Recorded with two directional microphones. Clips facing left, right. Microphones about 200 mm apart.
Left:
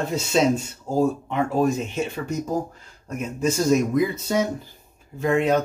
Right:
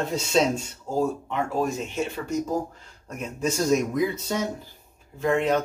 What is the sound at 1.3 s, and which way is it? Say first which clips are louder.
Speech: left 5 dB; 15° left (ahead or behind).